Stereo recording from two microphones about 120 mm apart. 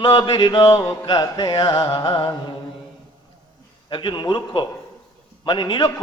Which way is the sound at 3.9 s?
40° left (ahead or behind).